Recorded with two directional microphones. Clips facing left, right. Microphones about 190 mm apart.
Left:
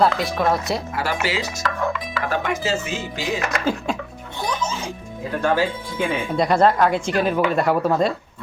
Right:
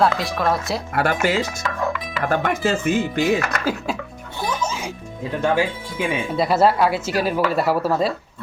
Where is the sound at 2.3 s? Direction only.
55° right (ahead or behind).